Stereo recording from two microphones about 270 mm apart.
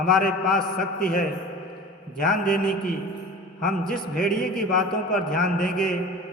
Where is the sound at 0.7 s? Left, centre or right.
Left.